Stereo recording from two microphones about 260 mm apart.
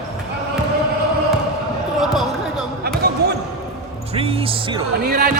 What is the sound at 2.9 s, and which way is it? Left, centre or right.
Basketball bounce, right.